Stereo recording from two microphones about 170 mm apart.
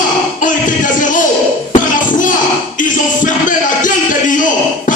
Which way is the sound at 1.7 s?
50° left (ahead or behind).